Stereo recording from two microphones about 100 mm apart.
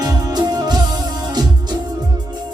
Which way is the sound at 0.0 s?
40° right (ahead or behind).